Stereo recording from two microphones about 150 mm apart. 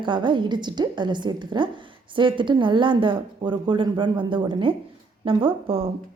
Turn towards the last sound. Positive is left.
turn(degrees=-40)  # may be behind; listen again after turning